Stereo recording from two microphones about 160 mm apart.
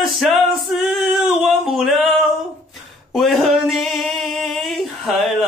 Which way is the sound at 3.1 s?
Centre (ahead or behind).